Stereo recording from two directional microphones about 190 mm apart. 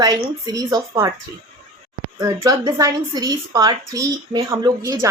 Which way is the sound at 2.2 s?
20° right (ahead or behind).